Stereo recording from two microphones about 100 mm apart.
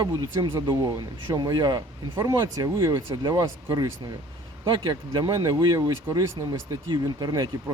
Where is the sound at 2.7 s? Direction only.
30° right (ahead or behind).